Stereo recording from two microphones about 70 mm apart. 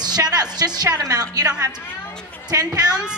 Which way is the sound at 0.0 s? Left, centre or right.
Right.